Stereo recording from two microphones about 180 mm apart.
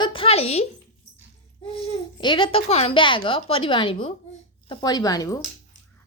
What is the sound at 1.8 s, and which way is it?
A woman's voice, 25° left (ahead or behind).